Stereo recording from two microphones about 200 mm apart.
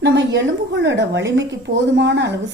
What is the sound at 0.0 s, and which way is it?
Speech, 60° right (ahead or behind).